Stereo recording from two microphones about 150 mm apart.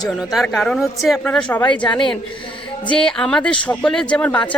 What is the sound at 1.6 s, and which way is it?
Speech, 30° left (ahead or behind).